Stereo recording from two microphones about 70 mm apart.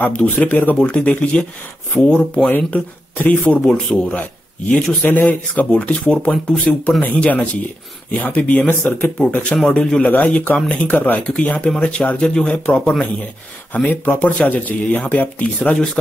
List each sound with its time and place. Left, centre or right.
0.0 s a man's voice: centre
2.5 s a man's voice: left
3.6 s a man's voice: centre